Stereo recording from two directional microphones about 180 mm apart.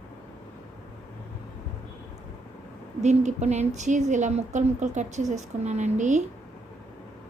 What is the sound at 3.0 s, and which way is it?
Speech, 40° right (ahead or behind).